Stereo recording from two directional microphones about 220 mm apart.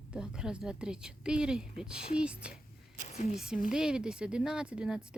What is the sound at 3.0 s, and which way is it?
Speech, 30° left (ahead or behind).